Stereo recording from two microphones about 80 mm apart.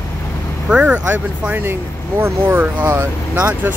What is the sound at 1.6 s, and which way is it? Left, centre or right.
Speech, right.